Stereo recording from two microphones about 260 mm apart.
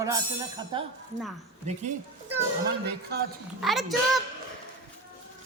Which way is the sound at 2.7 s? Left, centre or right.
Right.